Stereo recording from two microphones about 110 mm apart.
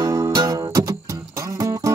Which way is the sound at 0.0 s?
30° right (ahead or behind).